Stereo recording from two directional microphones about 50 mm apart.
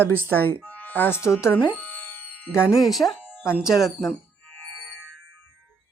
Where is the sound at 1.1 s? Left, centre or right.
Left.